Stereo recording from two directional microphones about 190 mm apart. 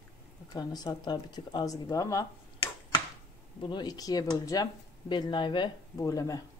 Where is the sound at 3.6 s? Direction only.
25° left (ahead or behind).